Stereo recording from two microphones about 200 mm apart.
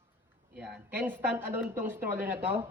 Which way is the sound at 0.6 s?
5° right (ahead or behind).